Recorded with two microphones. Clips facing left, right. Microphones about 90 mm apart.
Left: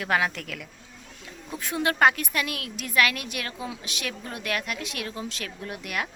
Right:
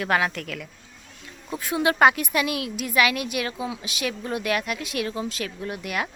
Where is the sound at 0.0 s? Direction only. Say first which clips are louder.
Right 2 dB; centre (ahead or behind).